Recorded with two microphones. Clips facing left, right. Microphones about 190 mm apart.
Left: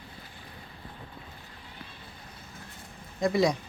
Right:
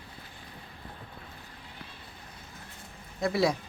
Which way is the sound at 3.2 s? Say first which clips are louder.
Left 2 dB; 5° right (ahead or behind).